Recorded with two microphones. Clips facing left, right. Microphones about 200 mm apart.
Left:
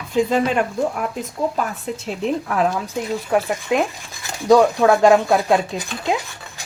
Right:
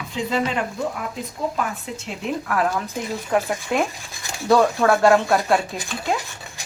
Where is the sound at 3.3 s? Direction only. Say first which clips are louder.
Left 2 dB; 10° left (ahead or behind).